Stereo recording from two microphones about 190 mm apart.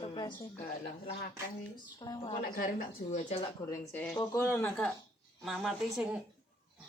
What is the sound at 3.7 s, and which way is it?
Speech, 10° left (ahead or behind).